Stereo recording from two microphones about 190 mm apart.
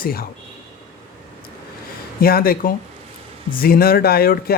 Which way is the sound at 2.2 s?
50° left (ahead or behind).